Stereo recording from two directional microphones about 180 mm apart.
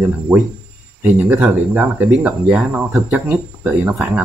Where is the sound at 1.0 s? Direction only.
15° right (ahead or behind).